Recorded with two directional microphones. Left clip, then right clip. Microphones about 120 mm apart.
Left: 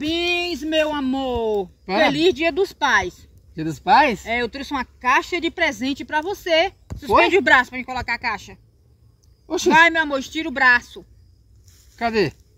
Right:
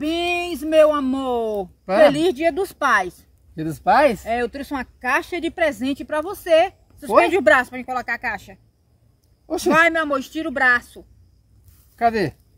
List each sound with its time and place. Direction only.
0.0 s speech: 30° right (ahead or behind)
7.1 s speech: 20° right (ahead or behind)
9.9 s speech: 30° right (ahead or behind)
12.0 s speech: 30° right (ahead or behind)